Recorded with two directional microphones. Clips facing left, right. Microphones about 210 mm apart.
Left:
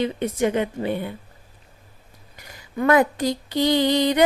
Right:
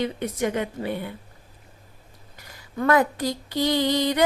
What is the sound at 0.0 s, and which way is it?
Music, 25° left (ahead or behind).